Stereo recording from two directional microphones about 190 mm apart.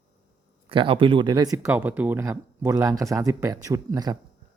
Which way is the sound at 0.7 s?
25° right (ahead or behind).